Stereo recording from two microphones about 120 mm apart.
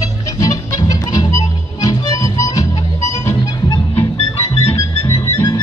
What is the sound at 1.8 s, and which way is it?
Music, 30° left (ahead or behind).